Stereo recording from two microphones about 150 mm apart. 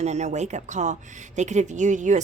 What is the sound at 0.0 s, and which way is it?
A woman's voice, 50° right (ahead or behind).